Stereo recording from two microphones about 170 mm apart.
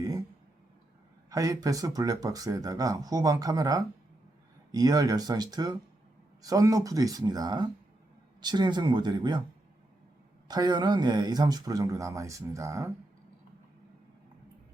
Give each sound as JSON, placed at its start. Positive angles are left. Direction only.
{"t": 1.3, "sound": "speech", "side_deg": -20}
{"t": 10.5, "sound": "speech", "side_deg": -25}